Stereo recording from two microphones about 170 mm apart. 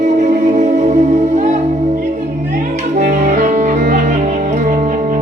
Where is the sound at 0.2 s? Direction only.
45° right (ahead or behind).